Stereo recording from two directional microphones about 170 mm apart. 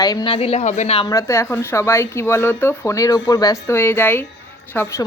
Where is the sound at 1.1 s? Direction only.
15° left (ahead or behind).